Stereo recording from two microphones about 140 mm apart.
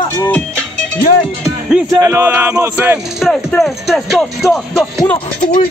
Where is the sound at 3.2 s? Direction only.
Centre (ahead or behind).